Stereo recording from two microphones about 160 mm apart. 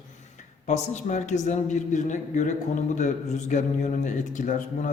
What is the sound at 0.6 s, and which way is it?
A man's voice, 45° left (ahead or behind).